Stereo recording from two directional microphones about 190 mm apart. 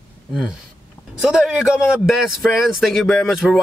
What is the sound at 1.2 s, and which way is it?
Speech, 5° right (ahead or behind).